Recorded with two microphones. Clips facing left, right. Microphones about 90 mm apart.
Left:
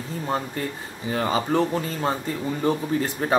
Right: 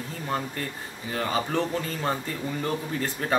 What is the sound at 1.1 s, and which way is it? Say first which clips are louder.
Speech: left 4 dB; 25° left (ahead or behind).